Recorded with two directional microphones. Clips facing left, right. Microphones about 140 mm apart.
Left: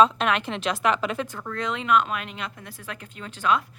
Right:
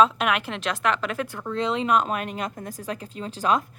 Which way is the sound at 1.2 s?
10° right (ahead or behind).